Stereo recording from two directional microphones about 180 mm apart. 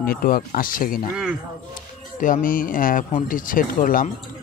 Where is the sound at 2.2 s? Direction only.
50° left (ahead or behind).